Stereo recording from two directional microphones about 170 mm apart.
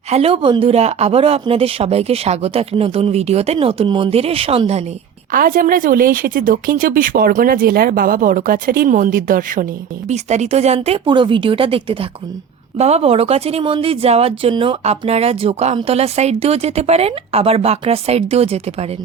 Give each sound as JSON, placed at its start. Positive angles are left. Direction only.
{"t": 0.1, "sound": "speech", "side_deg": -35}
{"t": 5.3, "sound": "a woman's voice", "side_deg": -55}
{"t": 10.1, "sound": "speech", "side_deg": -40}